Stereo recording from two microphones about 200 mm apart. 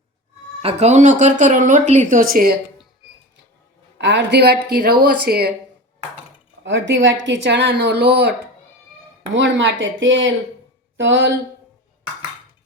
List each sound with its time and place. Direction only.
0.6 s speech: 30° right (ahead or behind)
4.0 s a woman's voice: 60° right (ahead or behind)
6.7 s a woman's voice: 65° right (ahead or behind)
9.3 s speech: 65° right (ahead or behind)